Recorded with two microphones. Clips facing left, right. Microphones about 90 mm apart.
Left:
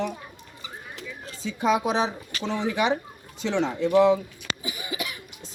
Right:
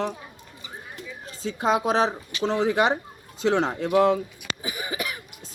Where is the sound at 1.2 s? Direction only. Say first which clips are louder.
Even; 35° right (ahead or behind).